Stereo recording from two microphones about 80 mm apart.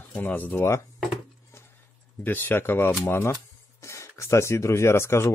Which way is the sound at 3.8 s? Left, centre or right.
Left.